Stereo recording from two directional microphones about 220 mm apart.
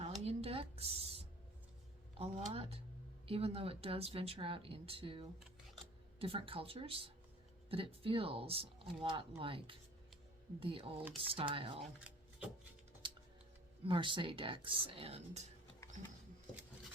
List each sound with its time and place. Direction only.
0.0 s a sound: 25° right (ahead or behind)
2.1 s speech: 25° right (ahead or behind)
11.8 s shuffling cards: 5° right (ahead or behind)
13.8 s speech: 20° right (ahead or behind)